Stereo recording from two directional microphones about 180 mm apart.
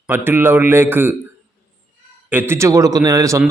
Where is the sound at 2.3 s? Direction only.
10° right (ahead or behind).